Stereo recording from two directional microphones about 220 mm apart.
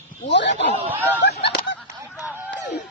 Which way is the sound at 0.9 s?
10° right (ahead or behind).